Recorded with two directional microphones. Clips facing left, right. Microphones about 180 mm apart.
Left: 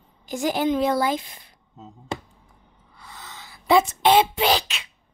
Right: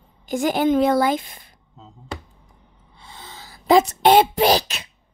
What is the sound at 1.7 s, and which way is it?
Finger snapping, 20° left (ahead or behind).